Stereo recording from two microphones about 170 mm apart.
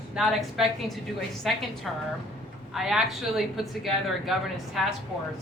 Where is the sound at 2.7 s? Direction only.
Centre (ahead or behind).